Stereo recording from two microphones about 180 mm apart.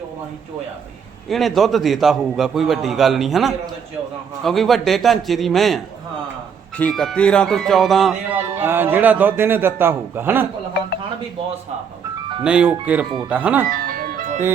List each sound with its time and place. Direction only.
1.3 s a man's voice: centre (ahead or behind)
8.5 s a man's voice: 10° right (ahead or behind)
12.4 s a man's voice: 5° right (ahead or behind)
13.7 s music: 55° right (ahead or behind)